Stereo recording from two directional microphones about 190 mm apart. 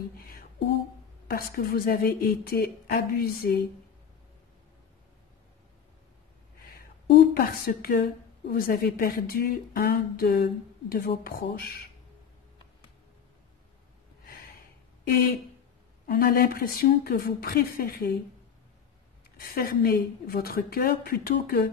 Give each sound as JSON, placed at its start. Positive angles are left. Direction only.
{"t": 1.2, "sound": "a woman's voice", "side_deg": 50}
{"t": 7.3, "sound": "a woman's voice", "side_deg": 50}
{"t": 14.2, "sound": "snort", "side_deg": 50}
{"t": 15.0, "sound": "a woman's voice", "side_deg": 50}
{"t": 19.3, "sound": "a woman's voice", "side_deg": 50}